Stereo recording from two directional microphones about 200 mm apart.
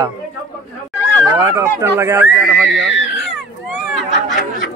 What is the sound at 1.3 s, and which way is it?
Speech, 15° right (ahead or behind).